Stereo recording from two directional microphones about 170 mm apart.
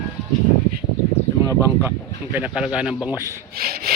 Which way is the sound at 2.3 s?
5° right (ahead or behind).